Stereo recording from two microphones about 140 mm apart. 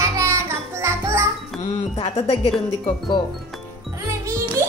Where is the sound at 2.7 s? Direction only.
30° left (ahead or behind).